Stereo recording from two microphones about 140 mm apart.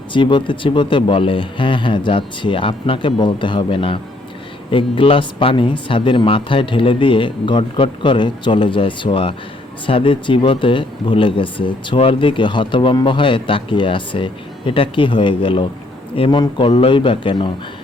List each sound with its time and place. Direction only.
0.1 s speech: 35° left (ahead or behind)